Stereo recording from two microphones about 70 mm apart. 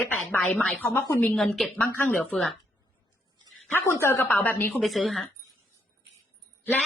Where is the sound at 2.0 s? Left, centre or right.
Left.